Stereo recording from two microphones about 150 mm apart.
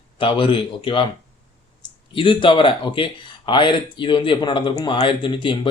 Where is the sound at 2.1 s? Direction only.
35° left (ahead or behind).